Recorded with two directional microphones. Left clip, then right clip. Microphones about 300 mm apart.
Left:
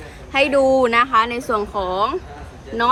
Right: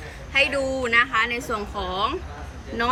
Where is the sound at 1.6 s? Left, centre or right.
Left.